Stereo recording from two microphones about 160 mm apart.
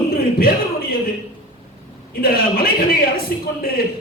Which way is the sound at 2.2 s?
70° left (ahead or behind).